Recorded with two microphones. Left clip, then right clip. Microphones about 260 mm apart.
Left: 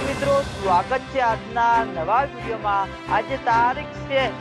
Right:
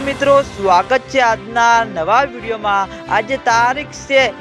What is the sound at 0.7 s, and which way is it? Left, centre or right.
Speech, right.